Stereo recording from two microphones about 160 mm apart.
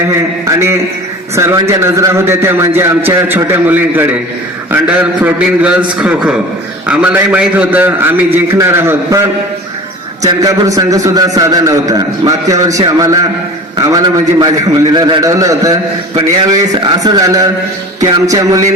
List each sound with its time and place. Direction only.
0.4 s a man's voice: 20° right (ahead or behind)
10.2 s a man's voice: 25° right (ahead or behind)